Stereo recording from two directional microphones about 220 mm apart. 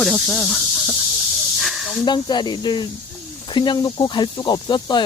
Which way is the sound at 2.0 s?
20° left (ahead or behind).